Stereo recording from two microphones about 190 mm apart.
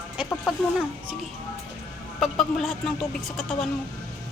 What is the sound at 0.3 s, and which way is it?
Speech, centre (ahead or behind).